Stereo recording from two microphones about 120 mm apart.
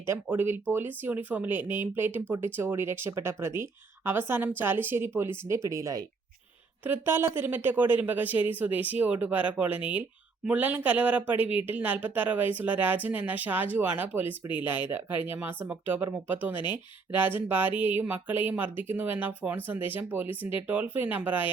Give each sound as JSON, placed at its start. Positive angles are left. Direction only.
{"t": 0.0, "sound": "speech", "side_deg": -20}
{"t": 6.8, "sound": "speech", "side_deg": -15}